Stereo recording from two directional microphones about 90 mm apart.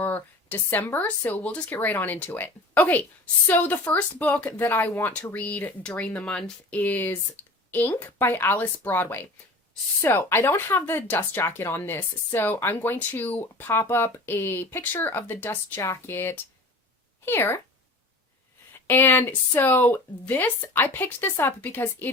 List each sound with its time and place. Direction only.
0.0 s a woman's voice: 20° left (ahead or behind)
18.9 s a woman's voice: 25° left (ahead or behind)